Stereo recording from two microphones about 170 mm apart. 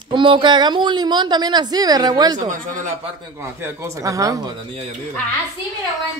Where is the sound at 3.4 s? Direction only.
15° right (ahead or behind).